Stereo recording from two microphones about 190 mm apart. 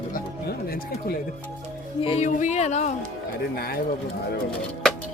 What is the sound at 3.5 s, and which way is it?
Speech, 55° left (ahead or behind).